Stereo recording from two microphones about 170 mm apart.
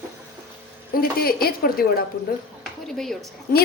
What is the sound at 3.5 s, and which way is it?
Speech, 55° left (ahead or behind).